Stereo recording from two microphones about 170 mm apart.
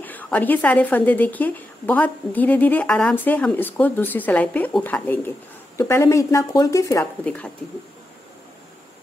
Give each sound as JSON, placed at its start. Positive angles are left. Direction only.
{"t": 0.0, "sound": "a woman's voice", "side_deg": 10}